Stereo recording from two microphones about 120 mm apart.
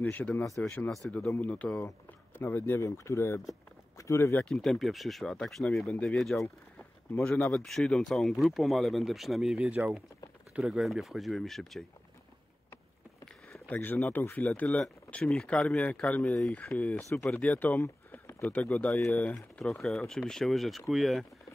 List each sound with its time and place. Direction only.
0.0 s speech: 15° left (ahead or behind)
4.5 s speech: 5° left (ahead or behind)
7.5 s speech: 5° left (ahead or behind)
13.5 s speech: 15° left (ahead or behind)